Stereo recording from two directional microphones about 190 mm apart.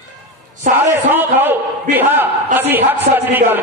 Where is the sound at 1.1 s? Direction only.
10° right (ahead or behind).